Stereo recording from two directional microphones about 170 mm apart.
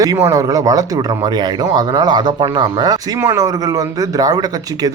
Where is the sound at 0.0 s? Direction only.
20° right (ahead or behind).